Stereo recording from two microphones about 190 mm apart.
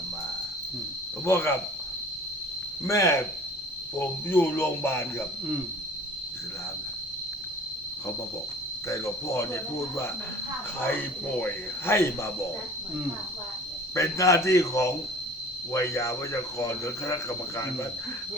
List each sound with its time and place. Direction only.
1.2 s speech: 15° left (ahead or behind)
2.8 s speech: 15° left (ahead or behind)
8.9 s speech: 15° left (ahead or behind)
11.3 s speech: 10° left (ahead or behind)
13.9 s speech: 15° left (ahead or behind)